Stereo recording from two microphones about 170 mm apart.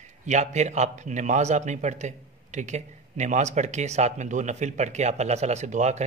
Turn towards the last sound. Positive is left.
turn(degrees=-45)  # may be behind; listen again after turning